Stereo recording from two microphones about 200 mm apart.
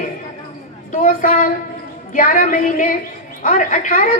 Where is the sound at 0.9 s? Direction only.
40° left (ahead or behind).